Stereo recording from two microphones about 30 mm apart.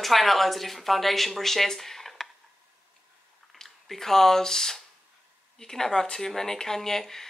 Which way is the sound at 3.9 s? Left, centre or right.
Centre.